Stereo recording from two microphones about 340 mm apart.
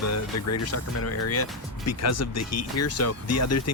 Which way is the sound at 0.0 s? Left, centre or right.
Left.